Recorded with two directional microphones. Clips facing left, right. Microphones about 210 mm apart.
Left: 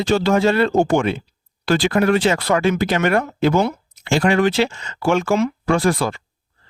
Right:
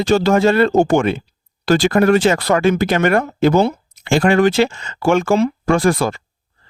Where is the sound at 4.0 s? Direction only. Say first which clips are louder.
Right 3 dB; 50° right (ahead or behind).